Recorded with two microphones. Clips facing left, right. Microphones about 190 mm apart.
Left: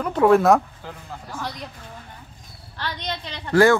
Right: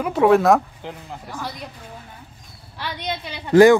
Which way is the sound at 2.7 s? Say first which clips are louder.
Right 2 dB; 10° right (ahead or behind).